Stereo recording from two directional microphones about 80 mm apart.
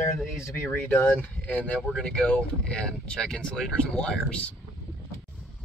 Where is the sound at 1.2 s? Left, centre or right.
Centre.